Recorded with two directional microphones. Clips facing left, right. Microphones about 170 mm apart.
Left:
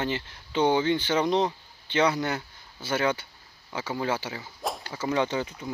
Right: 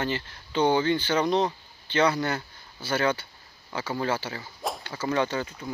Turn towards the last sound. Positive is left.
turn(degrees=15)  # may be behind; listen again after turning